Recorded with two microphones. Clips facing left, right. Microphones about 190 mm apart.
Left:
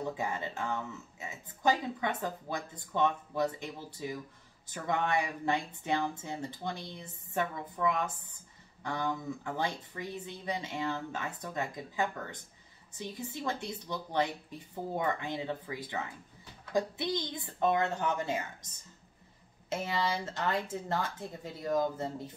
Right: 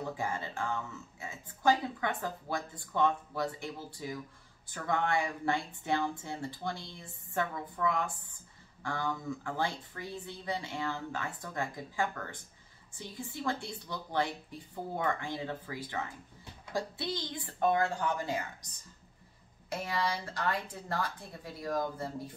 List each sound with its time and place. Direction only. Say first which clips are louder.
0.1 s speech: left 1 dB; 20° left (ahead or behind)
19.7 s speech: left 1 dB; 25° left (ahead or behind)